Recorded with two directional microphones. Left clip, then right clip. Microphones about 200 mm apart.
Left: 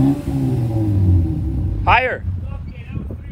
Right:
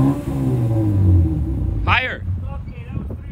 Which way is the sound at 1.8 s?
Centre (ahead or behind).